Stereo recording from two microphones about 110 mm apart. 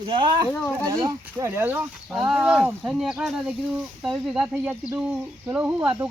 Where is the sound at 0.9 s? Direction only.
35° right (ahead or behind).